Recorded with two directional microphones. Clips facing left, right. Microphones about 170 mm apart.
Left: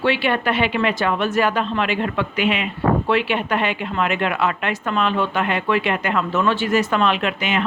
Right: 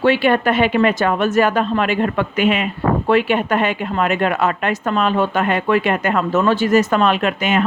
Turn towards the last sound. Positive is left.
turn(degrees=-45)  # may be behind; listen again after turning